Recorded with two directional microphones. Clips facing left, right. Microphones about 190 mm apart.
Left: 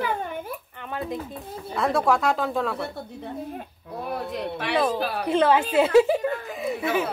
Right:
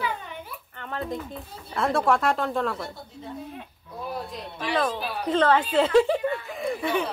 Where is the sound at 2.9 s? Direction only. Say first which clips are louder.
Left 4 dB; 50° left (ahead or behind).